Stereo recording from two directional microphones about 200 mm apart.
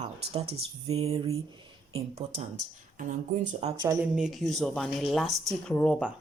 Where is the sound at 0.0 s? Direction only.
30° right (ahead or behind).